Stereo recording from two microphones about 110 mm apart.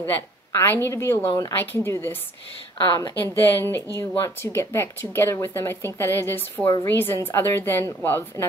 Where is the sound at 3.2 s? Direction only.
20° left (ahead or behind).